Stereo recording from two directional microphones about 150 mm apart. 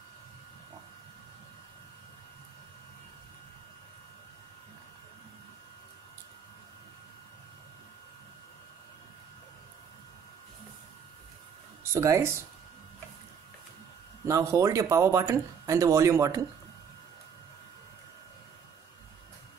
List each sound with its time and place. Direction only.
11.8 s speech: 15° right (ahead or behind)
14.2 s speech: 20° right (ahead or behind)